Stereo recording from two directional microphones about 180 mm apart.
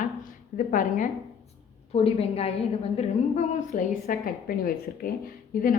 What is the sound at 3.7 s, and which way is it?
Speech, 55° left (ahead or behind).